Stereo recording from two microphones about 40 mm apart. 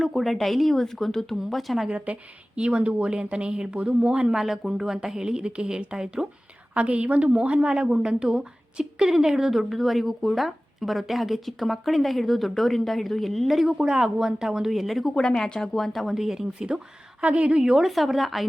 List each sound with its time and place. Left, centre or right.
0.0 s a woman's voice: centre
2.6 s speech: right
4.3 s speech: centre
6.7 s a woman's voice: right; by 13.7 s centre
13.7 s speech: right; by 15.1 s centre
15.1 s a woman's voice: centre
16.1 s speech: centre
16.6 s speech: right
17.8 s a woman's voice: centre